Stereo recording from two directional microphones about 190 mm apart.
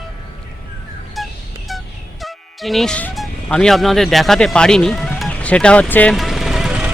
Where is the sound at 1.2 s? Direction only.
Centre (ahead or behind).